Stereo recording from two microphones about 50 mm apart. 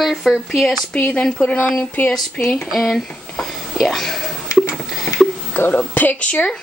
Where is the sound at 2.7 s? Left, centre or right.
Centre.